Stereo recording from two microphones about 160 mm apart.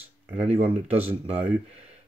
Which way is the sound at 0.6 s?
40° right (ahead or behind).